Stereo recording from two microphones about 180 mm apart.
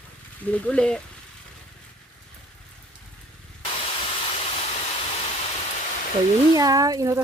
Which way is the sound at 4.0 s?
35° left (ahead or behind).